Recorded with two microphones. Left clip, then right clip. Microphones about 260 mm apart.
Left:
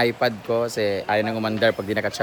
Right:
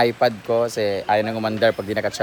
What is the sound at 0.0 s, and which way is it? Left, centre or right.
Speech, centre.